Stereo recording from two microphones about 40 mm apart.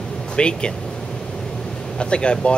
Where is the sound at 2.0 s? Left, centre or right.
Left.